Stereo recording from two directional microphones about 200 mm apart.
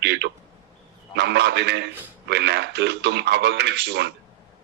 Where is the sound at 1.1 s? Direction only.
55° right (ahead or behind).